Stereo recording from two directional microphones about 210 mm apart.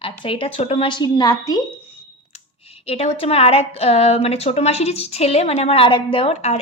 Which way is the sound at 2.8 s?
25° left (ahead or behind).